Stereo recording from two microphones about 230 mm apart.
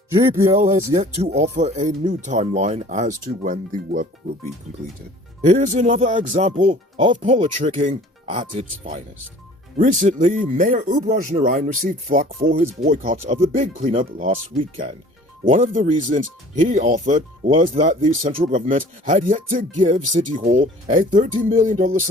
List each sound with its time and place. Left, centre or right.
0.5 s speech: right
5.5 s speech: right
15.4 s speech: right